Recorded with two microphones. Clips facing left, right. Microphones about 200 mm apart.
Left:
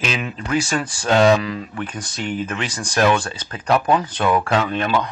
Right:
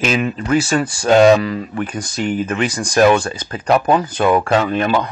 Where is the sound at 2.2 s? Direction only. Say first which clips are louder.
Right 6 dB; 40° right (ahead or behind).